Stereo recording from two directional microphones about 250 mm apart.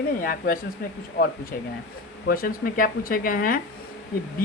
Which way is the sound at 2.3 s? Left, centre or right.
Left.